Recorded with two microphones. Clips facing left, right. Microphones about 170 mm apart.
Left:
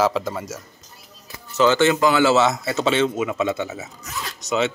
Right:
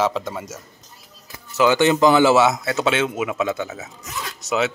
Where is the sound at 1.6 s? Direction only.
15° right (ahead or behind).